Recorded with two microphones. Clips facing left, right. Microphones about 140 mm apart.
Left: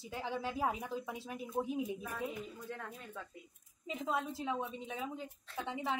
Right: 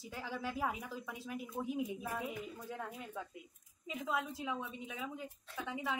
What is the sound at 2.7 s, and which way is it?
Speech, 10° right (ahead or behind).